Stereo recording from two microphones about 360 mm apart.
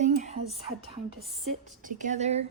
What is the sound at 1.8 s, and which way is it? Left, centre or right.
Speech, right.